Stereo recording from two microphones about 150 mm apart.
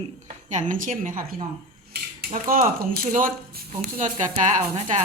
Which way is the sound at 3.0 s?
75° right (ahead or behind).